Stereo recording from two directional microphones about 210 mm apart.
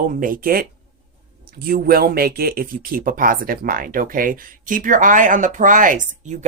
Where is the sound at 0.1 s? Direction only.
40° right (ahead or behind).